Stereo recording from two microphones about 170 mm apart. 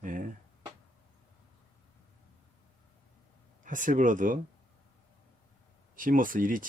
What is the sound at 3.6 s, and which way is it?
Speech, 50° right (ahead or behind).